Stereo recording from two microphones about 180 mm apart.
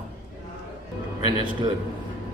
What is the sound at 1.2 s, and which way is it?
Speech, 25° right (ahead or behind).